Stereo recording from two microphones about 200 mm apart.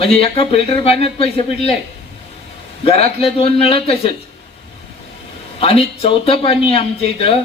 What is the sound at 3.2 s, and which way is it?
Speech, 30° left (ahead or behind).